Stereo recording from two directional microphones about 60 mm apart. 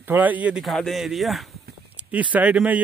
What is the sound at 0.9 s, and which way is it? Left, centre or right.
Speech, centre.